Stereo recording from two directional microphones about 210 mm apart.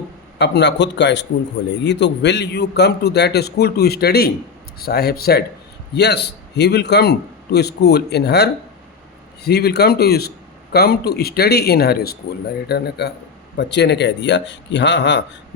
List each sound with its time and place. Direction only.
0.3 s a man's voice: 55° left (ahead or behind)